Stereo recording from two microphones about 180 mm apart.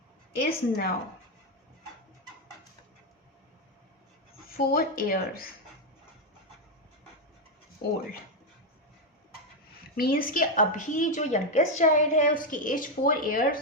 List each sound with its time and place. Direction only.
0.4 s speech: 60° left (ahead or behind)
4.5 s speech: 55° left (ahead or behind)
9.9 s a woman's voice: 55° left (ahead or behind)